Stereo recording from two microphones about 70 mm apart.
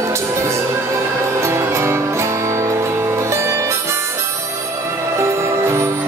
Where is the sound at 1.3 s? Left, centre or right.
Right.